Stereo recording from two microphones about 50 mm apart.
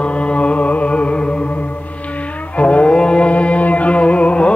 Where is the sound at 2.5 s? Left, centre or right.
Left.